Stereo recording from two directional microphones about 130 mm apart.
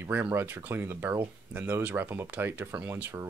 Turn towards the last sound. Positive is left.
turn(degrees=-15)  # may be behind; listen again after turning